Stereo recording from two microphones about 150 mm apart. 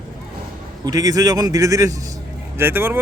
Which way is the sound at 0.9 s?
25° right (ahead or behind).